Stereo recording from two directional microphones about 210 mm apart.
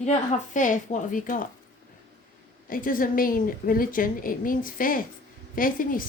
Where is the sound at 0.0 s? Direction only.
35° left (ahead or behind).